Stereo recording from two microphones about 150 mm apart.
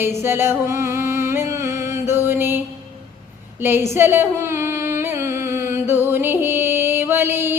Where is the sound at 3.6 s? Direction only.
15° right (ahead or behind).